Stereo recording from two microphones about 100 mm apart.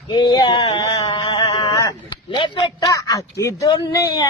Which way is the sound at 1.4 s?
40° left (ahead or behind).